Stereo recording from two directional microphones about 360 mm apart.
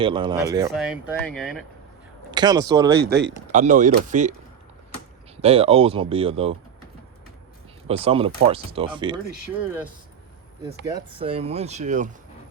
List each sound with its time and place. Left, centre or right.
0.0 s speech: centre
2.3 s speech: centre
3.0 s speech: right
5.4 s speech: centre
7.9 s speech: centre
10.8 s speech: centre